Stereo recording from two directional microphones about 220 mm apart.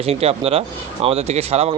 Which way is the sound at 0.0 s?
25° right (ahead or behind).